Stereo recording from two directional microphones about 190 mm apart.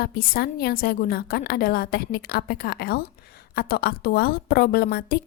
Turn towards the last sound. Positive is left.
turn(degrees=50)  # may be behind; listen again after turning